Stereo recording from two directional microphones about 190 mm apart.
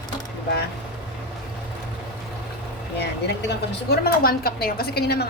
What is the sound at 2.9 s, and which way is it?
Speech, 60° left (ahead or behind).